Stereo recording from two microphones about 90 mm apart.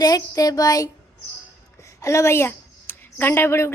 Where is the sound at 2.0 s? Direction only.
35° left (ahead or behind).